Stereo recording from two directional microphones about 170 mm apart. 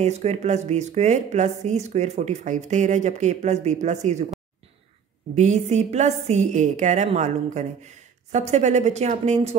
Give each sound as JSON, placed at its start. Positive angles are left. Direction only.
{"t": 0.0, "sound": "speech", "side_deg": -40}
{"t": 5.3, "sound": "speech", "side_deg": -45}